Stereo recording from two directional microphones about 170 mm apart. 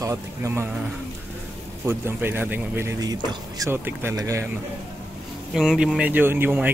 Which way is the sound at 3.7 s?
15° right (ahead or behind).